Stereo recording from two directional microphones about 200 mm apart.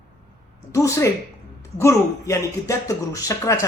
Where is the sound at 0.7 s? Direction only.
15° left (ahead or behind).